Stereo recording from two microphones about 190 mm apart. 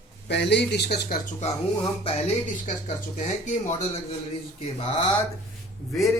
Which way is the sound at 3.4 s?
40° left (ahead or behind).